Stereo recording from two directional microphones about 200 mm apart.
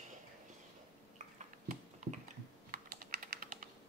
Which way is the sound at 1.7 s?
40° right (ahead or behind).